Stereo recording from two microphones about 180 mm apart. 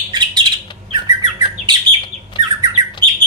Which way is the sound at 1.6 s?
25° right (ahead or behind).